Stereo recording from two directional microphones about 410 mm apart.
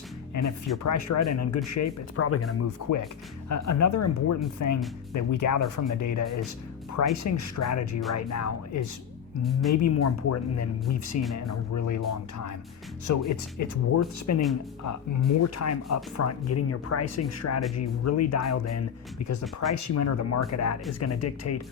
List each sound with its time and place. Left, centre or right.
0.4 s speech: left
9.4 s speech: centre
9.8 s speech: left